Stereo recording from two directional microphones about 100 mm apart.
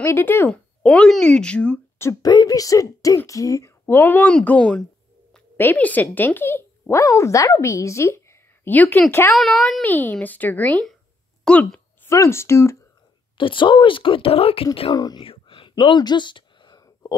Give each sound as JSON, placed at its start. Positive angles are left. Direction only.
{"t": 0.0, "sound": "speech", "side_deg": 20}
{"t": 0.5, "sound": "speech", "side_deg": 10}
{"t": 2.2, "sound": "speech", "side_deg": 40}
{"t": 9.3, "sound": "speech", "side_deg": 5}
{"t": 9.8, "sound": "speech", "side_deg": 15}
{"t": 12.0, "sound": "speech", "side_deg": 30}
{"t": 13.4, "sound": "speech", "side_deg": 55}
{"t": 15.0, "sound": "speech", "side_deg": 40}
{"t": 15.2, "sound": "whispering", "side_deg": 60}
{"t": 15.7, "sound": "a sound", "side_deg": 50}
{"t": 16.8, "sound": "whispering", "side_deg": 40}